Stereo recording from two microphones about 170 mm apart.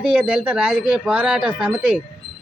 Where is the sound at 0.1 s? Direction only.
5° right (ahead or behind).